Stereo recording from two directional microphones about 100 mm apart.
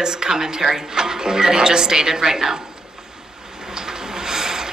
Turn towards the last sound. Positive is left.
turn(degrees=-5)  # may be behind; listen again after turning